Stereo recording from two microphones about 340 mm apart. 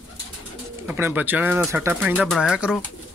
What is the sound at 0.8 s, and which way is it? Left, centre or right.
Speech, centre.